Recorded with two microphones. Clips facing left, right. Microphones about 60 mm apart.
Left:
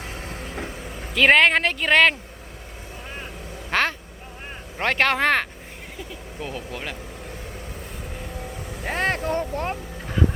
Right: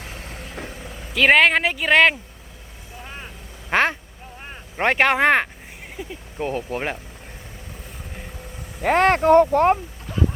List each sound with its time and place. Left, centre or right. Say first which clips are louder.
1.1 s speech: right 1 dB; centre
3.7 s speech: right 3 dB; right
6.4 s speech: right 7 dB; right
8.8 s speech: right 8 dB; right